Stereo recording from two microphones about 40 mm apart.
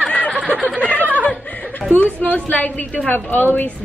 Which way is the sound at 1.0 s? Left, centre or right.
Right.